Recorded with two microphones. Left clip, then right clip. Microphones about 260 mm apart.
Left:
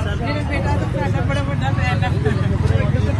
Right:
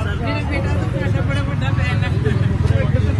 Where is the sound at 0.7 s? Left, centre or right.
Centre.